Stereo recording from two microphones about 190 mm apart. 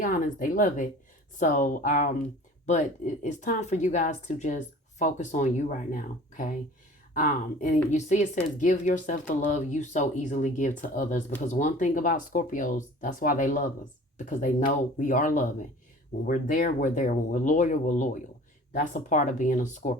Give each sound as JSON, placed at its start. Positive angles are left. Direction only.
{"t": 0.0, "sound": "speech", "side_deg": 45}
{"t": 3.2, "sound": "a woman's voice", "side_deg": 40}